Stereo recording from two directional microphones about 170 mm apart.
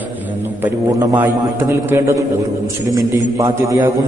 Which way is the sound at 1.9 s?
15° right (ahead or behind).